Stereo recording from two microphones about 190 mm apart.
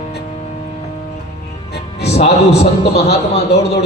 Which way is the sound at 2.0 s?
35° left (ahead or behind).